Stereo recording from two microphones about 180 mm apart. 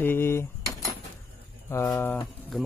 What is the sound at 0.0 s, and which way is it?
Keys jangling, 10° left (ahead or behind).